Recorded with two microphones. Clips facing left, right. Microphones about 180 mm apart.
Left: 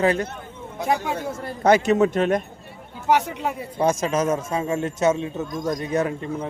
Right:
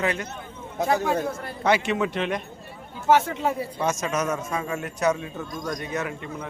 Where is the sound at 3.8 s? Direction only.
30° left (ahead or behind).